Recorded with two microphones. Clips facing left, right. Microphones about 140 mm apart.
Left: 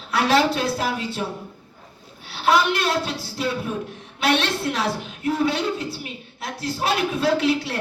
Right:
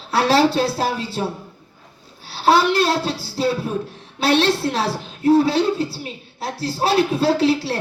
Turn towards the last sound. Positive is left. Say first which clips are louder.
# right 3 dB
turn(degrees=-30)  # may be behind; listen again after turning